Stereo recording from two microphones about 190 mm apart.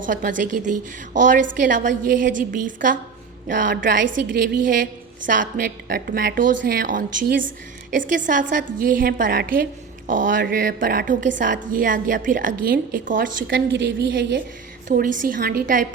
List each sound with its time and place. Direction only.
0.0 s a woman's voice: 45° right (ahead or behind)
13.5 s a woman's voice: 75° right (ahead or behind)
14.8 s a woman's voice: 45° right (ahead or behind)